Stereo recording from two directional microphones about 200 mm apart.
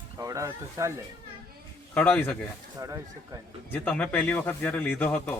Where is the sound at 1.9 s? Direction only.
5° left (ahead or behind).